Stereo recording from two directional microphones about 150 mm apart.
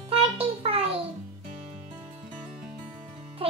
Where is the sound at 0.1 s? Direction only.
40° right (ahead or behind).